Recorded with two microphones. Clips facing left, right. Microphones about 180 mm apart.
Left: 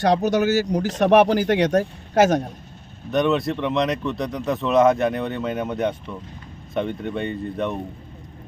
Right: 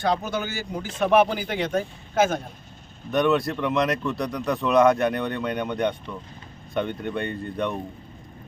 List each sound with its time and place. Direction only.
0.3 s speech: 80° left
3.1 s speech: centre (ahead or behind)